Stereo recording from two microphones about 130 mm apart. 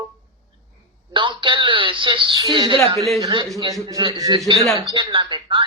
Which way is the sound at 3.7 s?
25° right (ahead or behind).